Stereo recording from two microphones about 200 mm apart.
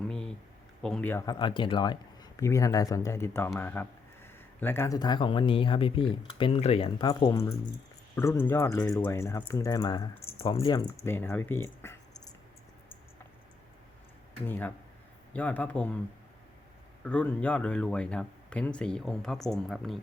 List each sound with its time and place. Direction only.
0.0 s a sound: 5° left (ahead or behind)
0.8 s speech: 5° left (ahead or behind)
14.4 s speech: 10° left (ahead or behind)
17.0 s speech: 5° left (ahead or behind)